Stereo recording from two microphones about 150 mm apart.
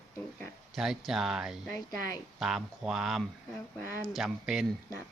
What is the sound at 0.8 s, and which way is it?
Speech, 5° right (ahead or behind).